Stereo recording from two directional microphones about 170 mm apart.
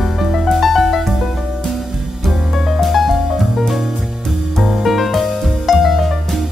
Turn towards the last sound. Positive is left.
turn(degrees=0)  # may be behind; listen again after turning